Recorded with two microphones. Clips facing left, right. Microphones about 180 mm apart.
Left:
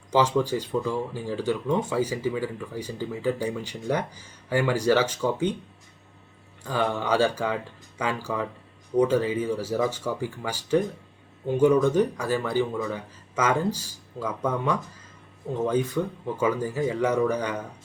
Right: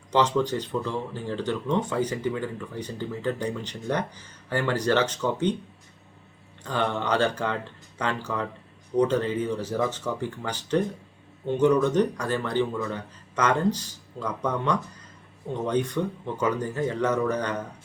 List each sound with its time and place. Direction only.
0.1 s speech: 10° left (ahead or behind)
6.6 s speech: 10° left (ahead or behind)